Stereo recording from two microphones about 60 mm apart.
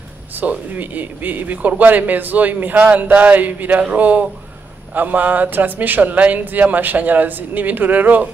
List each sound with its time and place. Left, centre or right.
0.4 s a man's voice: right